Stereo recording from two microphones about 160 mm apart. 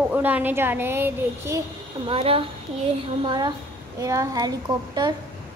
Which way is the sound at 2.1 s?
35° right (ahead or behind).